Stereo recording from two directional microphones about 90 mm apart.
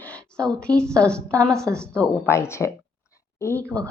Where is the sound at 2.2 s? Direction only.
30° left (ahead or behind).